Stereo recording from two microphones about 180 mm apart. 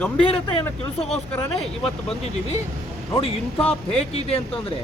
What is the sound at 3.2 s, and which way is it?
Speech, 35° left (ahead or behind).